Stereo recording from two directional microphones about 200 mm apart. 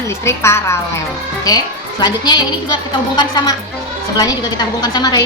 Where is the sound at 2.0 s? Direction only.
20° left (ahead or behind).